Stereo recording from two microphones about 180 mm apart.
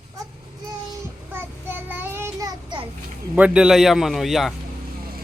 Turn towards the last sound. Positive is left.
turn(degrees=0)  # may be behind; listen again after turning